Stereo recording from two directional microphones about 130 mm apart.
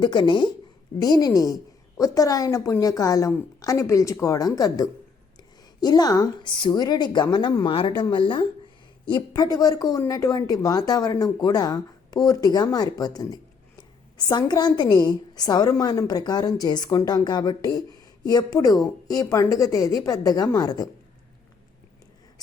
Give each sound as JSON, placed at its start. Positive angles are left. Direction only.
{"t": 0.0, "sound": "a woman's voice", "side_deg": 35}